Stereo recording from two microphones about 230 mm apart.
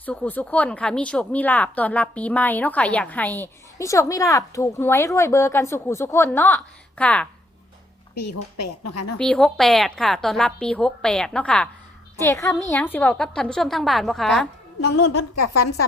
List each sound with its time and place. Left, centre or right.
0.0 s a woman's voice: centre
8.8 s a woman's voice: left
9.1 s a woman's voice: centre
15.1 s a woman's voice: left